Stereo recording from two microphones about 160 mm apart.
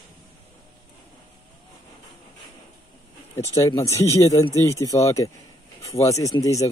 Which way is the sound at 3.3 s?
20° left (ahead or behind).